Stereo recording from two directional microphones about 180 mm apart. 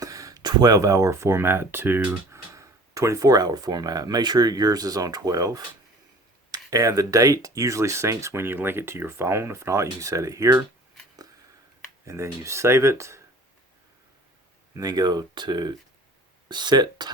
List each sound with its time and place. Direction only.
0.0 s speech: 20° right (ahead or behind)
12.0 s speech: 15° right (ahead or behind)
14.7 s speech: 20° right (ahead or behind)